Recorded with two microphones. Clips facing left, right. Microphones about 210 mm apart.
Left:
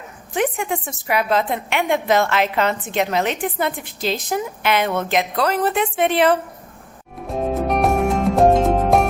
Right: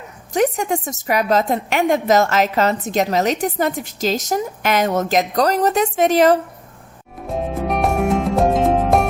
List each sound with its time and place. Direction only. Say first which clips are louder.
0.3 s a woman's voice: right 4 dB; 40° right (ahead or behind)
7.3 s music: left 1 dB; centre (ahead or behind)